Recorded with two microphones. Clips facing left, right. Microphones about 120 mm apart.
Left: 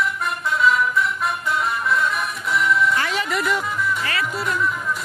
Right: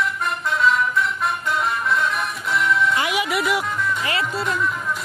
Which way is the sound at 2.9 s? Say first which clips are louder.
Right 1 dB; 15° right (ahead or behind).